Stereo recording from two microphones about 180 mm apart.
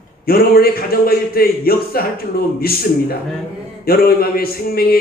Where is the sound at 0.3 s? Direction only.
55° left (ahead or behind).